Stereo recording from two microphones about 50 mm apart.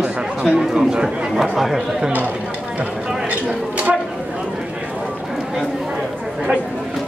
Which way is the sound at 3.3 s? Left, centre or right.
Right.